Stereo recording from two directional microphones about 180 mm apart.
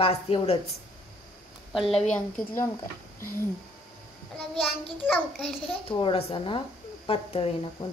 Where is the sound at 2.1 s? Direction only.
10° left (ahead or behind).